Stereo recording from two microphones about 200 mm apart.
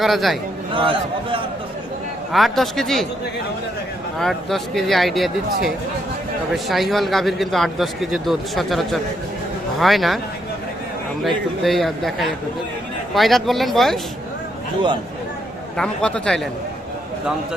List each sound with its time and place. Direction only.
0.0 s a man's voice: centre (ahead or behind)
0.8 s a man's voice: 25° right (ahead or behind)
2.3 s a man's voice: centre (ahead or behind)
4.2 s a man's voice: centre (ahead or behind)
6.5 s a man's voice: centre (ahead or behind)
11.2 s a man's voice: centre (ahead or behind)
15.8 s a man's voice: 5° left (ahead or behind)